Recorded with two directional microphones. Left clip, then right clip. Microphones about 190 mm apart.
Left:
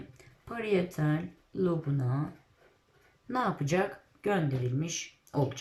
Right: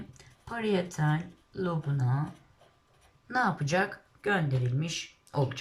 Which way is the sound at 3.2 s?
20° left (ahead or behind).